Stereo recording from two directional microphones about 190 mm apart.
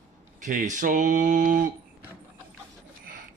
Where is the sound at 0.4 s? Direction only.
40° right (ahead or behind).